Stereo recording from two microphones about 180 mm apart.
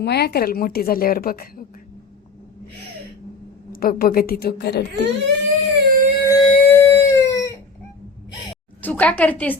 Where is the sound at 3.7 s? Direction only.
55° left (ahead or behind).